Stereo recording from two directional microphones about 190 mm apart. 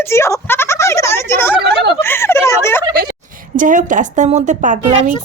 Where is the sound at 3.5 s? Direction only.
45° right (ahead or behind).